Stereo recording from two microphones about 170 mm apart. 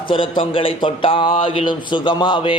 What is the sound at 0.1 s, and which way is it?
Speech, 30° left (ahead or behind).